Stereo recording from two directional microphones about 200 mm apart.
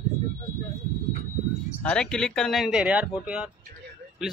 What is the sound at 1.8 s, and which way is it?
Speech, 5° left (ahead or behind).